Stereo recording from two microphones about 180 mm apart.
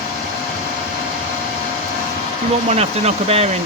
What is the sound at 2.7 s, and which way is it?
Speech, 35° right (ahead or behind).